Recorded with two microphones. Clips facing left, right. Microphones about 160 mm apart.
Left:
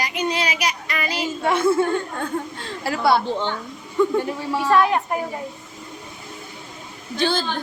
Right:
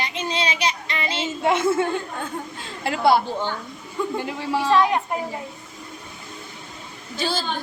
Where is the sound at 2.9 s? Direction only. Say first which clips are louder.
Right 1 dB; 20° right (ahead or behind).